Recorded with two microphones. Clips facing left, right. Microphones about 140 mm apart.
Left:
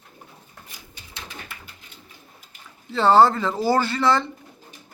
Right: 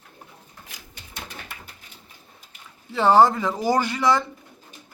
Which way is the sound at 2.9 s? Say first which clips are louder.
Left 1 dB; 15° right (ahead or behind).